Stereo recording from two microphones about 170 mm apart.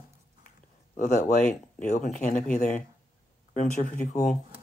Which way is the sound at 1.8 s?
50° left (ahead or behind).